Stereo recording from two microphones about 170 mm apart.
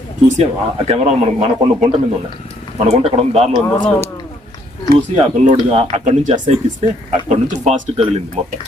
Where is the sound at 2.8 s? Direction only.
40° right (ahead or behind).